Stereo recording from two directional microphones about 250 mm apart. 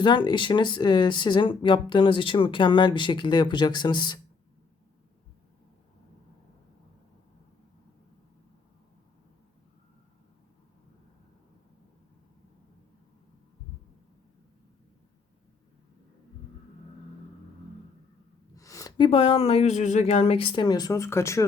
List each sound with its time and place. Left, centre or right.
0.0 s speech: centre
18.5 s speech: centre